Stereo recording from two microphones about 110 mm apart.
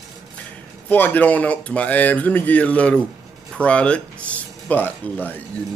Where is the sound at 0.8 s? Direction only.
15° left (ahead or behind).